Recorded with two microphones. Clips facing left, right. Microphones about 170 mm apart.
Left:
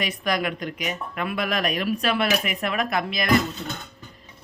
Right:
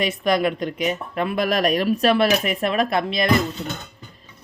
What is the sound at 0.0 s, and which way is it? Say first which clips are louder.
Speech: right 6 dB; 25° right (ahead or behind).